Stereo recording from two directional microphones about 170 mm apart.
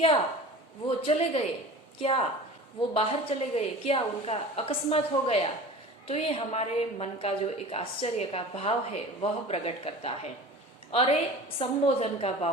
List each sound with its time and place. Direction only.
0.9 s a woman's voice: 35° left (ahead or behind)